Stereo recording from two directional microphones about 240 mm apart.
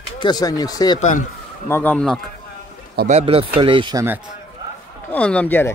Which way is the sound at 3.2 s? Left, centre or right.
Right.